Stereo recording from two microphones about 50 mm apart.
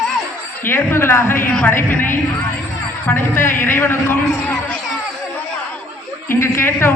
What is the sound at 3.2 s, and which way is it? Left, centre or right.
A man's voice, left.